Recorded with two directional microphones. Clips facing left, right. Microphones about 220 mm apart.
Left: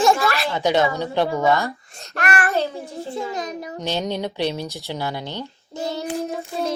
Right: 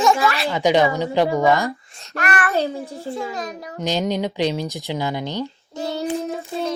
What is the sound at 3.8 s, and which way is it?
Speech, 15° right (ahead or behind).